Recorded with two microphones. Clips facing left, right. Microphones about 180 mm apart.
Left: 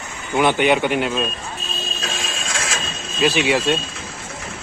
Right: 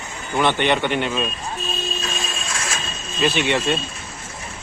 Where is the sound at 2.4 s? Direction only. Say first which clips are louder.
Left 2 dB; 90° left.